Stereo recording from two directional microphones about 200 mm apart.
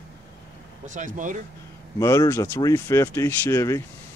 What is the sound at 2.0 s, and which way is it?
Speech, 15° left (ahead or behind).